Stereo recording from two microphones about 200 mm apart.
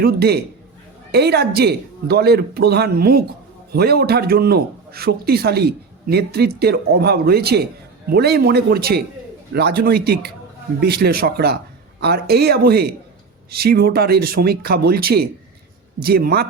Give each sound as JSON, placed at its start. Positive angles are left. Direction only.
{"t": 0.0, "sound": "a man's voice", "side_deg": -55}